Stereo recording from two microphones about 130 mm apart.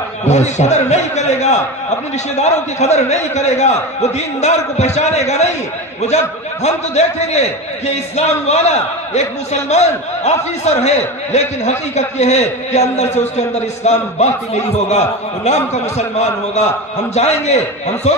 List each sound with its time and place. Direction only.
0.3 s a man's voice: 60° left (ahead or behind)